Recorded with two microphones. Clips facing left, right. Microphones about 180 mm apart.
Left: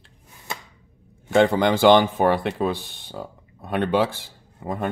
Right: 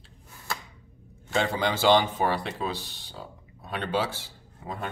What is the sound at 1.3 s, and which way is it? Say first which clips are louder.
Speech: left 9 dB; 55° left (ahead or behind).